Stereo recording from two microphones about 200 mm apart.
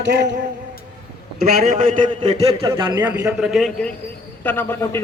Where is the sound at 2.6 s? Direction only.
20° right (ahead or behind).